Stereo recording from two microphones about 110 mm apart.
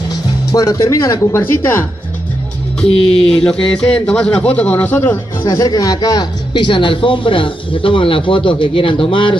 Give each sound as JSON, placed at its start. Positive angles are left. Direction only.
{"t": 0.5, "sound": "speech", "side_deg": 35}
{"t": 2.8, "sound": "speech", "side_deg": 5}
{"t": 5.5, "sound": "speech", "side_deg": 35}